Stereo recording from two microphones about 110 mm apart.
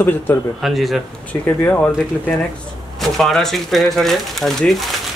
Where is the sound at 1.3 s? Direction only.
10° left (ahead or behind).